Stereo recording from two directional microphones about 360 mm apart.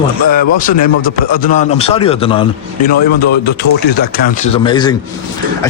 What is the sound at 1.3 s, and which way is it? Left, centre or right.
Speech, centre.